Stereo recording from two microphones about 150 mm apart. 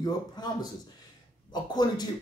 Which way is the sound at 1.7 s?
30° left (ahead or behind).